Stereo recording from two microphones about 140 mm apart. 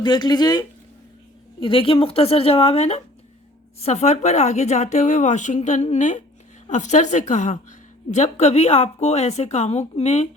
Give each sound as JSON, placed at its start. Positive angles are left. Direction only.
{"t": 0.0, "sound": "a woman's voice", "side_deg": 30}